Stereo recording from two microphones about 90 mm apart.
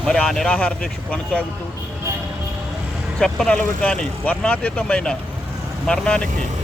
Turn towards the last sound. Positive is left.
turn(degrees=10)  # may be behind; listen again after turning